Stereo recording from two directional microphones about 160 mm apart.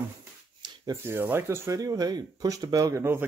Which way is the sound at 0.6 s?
30° right (ahead or behind).